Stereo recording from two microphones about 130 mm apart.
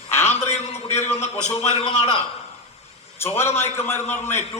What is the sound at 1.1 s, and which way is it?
Speech, 60° left (ahead or behind).